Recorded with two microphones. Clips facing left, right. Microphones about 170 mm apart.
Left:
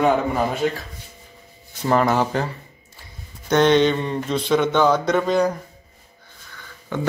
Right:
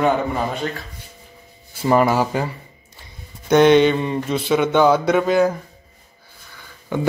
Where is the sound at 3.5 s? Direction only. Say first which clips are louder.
Right 3 dB; 10° right (ahead or behind).